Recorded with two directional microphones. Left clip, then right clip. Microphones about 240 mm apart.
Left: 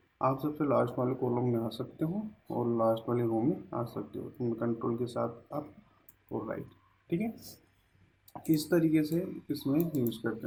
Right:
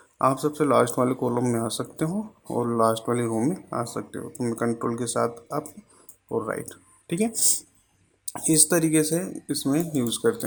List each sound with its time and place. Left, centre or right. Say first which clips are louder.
0.2 s speech: right 8 dB; right